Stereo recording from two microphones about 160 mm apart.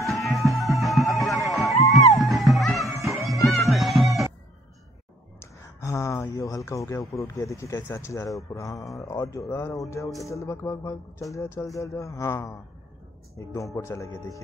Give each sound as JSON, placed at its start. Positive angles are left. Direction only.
{"t": 0.0, "sound": "music", "side_deg": 0}
{"t": 5.4, "sound": "a sound", "side_deg": 20}
{"t": 7.3, "sound": "speech", "side_deg": 20}